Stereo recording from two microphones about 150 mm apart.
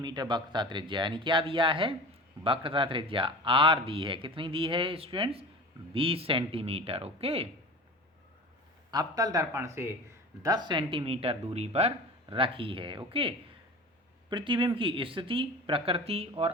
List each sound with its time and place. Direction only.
0.0 s a man's voice: 30° right (ahead or behind)
8.9 s a man's voice: 25° right (ahead or behind); by 16.5 s 40° right (ahead or behind)